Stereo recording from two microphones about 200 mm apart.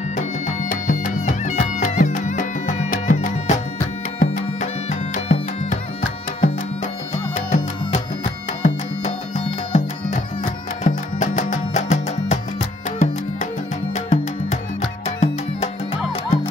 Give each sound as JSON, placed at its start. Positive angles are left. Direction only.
{"t": 0.1, "sound": "music", "side_deg": 40}
{"t": 8.6, "sound": "music", "side_deg": 35}